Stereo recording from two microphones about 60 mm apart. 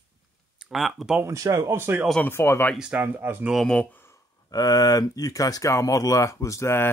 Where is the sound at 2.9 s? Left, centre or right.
Right.